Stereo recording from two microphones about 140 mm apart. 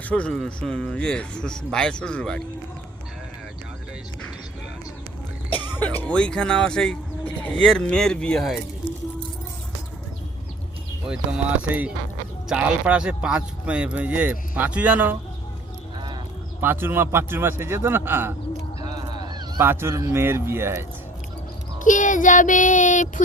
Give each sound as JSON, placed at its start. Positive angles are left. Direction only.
{"t": 0.1, "sound": "speech", "side_deg": 10}
{"t": 6.0, "sound": "speech", "side_deg": 10}
{"t": 11.1, "sound": "speech", "side_deg": -10}
{"t": 16.6, "sound": "speech", "side_deg": -15}
{"t": 18.8, "sound": "a sound", "side_deg": -30}
{"t": 19.6, "sound": "speech", "side_deg": -15}
{"t": 21.8, "sound": "child singing", "side_deg": 65}